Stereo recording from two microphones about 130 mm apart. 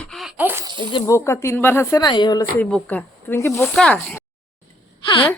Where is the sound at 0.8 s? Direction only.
40° left (ahead or behind).